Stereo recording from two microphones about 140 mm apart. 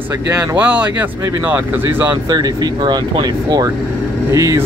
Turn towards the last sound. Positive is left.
turn(degrees=-20)  # may be behind; listen again after turning